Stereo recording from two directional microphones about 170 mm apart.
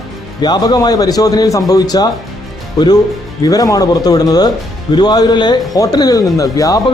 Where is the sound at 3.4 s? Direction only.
20° left (ahead or behind).